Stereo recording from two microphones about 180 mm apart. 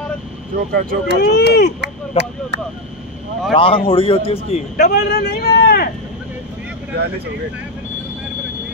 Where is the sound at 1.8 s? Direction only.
75° right (ahead or behind).